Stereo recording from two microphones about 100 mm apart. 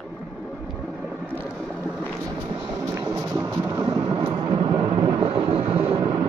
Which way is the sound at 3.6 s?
50° right (ahead or behind).